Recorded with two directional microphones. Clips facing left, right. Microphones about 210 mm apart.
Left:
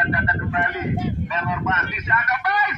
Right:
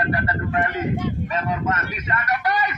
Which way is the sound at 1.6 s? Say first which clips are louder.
Right 1 dB; 35° right (ahead or behind).